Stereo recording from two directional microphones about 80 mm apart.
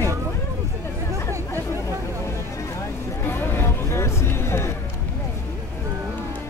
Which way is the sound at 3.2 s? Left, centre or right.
Left.